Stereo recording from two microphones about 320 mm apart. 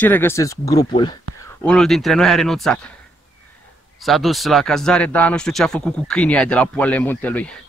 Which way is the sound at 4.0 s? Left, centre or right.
Centre.